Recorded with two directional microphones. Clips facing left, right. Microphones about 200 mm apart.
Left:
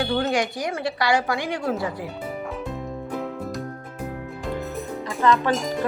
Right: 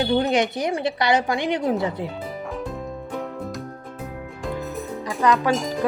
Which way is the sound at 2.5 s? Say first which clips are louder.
Right 1 dB; centre (ahead or behind).